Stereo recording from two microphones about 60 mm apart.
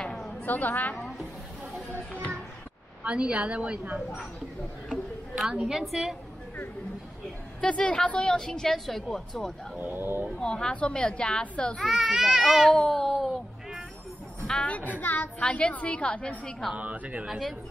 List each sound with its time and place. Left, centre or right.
0.0 s a sound: centre
0.5 s a woman's voice: left
3.0 s a woman's voice: centre
5.5 s a woman's voice: centre
7.6 s a woman's voice: centre
9.8 s speech: right
10.4 s a woman's voice: centre
11.8 s a child's voice: centre
12.7 s a sound: centre
14.5 s a woman's voice: centre
14.9 s a woman's voice: left
15.4 s a woman's voice: centre
16.7 s a woman's voice: right
17.3 s a child's voice: centre